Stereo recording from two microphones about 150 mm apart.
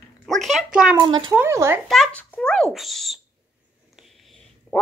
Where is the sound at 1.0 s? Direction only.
30° right (ahead or behind).